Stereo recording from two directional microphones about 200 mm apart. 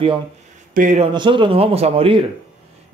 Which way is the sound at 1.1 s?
25° right (ahead or behind).